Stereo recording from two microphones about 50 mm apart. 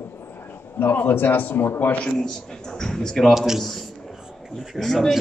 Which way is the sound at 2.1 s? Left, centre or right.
Centre.